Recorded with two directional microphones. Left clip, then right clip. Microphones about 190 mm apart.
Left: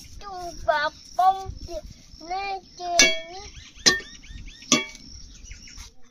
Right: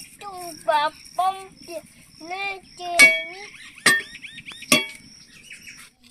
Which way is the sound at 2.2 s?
35° right (ahead or behind).